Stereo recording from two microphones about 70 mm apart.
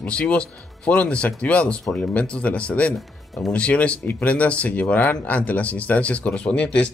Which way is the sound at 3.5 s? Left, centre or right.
Centre.